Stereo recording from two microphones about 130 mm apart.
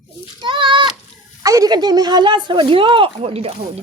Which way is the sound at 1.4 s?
25° right (ahead or behind).